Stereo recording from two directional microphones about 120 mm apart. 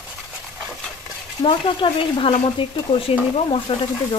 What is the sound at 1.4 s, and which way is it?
Speech, 45° left (ahead or behind).